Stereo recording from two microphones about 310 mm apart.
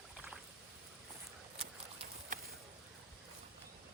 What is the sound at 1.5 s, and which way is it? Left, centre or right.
Boat, centre.